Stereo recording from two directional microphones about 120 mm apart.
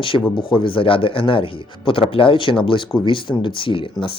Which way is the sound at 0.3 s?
45° left (ahead or behind).